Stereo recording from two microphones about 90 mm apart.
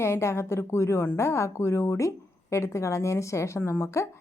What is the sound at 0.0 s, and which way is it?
A woman's voice, 30° left (ahead or behind).